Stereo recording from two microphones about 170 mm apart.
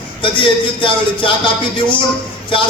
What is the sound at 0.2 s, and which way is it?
A man's voice, 30° left (ahead or behind).